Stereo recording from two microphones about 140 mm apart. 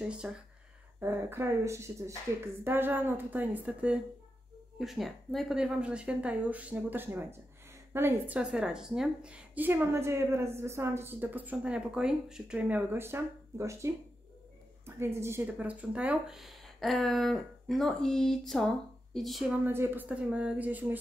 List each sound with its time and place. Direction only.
0.0 s a woman's voice: 5° right (ahead or behind)
19.6 s a woman's voice: 15° right (ahead or behind)